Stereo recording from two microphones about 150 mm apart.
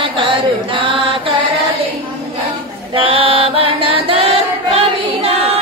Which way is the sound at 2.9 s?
35° right (ahead or behind).